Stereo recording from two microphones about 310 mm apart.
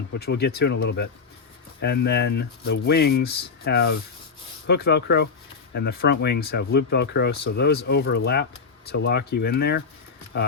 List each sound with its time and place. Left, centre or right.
0.1 s speech: left